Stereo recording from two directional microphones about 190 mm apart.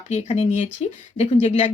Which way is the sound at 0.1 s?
35° left (ahead or behind).